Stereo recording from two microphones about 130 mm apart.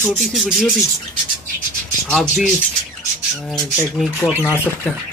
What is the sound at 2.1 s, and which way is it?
Bird, 5° left (ahead or behind).